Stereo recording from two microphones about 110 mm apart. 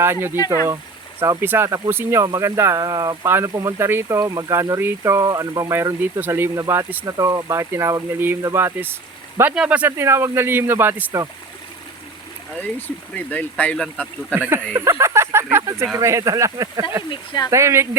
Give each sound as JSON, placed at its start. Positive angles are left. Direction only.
{"t": 0.0, "sound": "speech", "side_deg": -20}
{"t": 0.3, "sound": "speech", "side_deg": 30}
{"t": 1.2, "sound": "speech", "side_deg": -25}
{"t": 4.2, "sound": "speech", "side_deg": -30}
{"t": 13.1, "sound": "speech", "side_deg": 15}
{"t": 13.8, "sound": "speech", "side_deg": 0}
{"t": 14.3, "sound": "speech", "side_deg": -20}
{"t": 17.1, "sound": "speech", "side_deg": 40}
{"t": 17.5, "sound": "speech", "side_deg": -25}